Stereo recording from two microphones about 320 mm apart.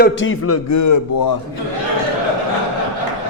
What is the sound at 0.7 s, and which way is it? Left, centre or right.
Speech, left.